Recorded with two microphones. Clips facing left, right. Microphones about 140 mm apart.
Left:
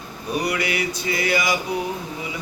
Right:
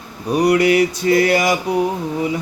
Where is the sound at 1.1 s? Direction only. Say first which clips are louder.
Right 8 dB; 50° right (ahead or behind).